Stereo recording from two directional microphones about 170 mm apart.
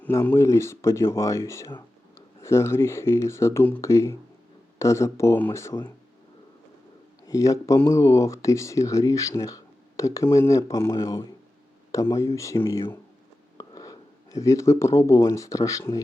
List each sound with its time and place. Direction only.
0.0 s speech: 15° left (ahead or behind)
7.3 s speech: 20° left (ahead or behind)